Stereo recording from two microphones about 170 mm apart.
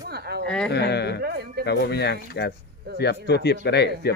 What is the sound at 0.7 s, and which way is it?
Speech, 75° left (ahead or behind).